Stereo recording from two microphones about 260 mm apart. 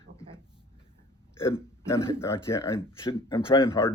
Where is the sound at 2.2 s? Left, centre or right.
Centre.